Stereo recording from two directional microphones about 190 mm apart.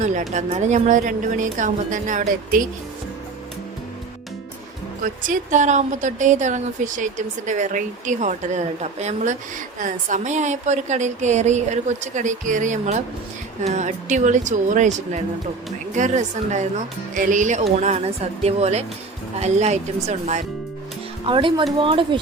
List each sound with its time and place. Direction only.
0.0 s speech: 40° right (ahead or behind)
5.0 s speech: 40° right (ahead or behind)
21.2 s speech: 25° right (ahead or behind)